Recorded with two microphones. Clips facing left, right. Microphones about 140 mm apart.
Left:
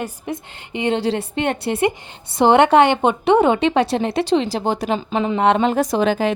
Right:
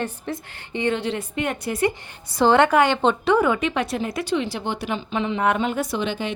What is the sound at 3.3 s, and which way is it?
Speech, 25° left (ahead or behind).